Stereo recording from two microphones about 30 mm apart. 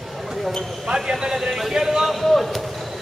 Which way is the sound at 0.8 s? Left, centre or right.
Centre.